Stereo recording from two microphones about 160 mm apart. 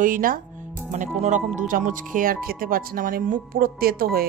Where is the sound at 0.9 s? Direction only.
50° right (ahead or behind).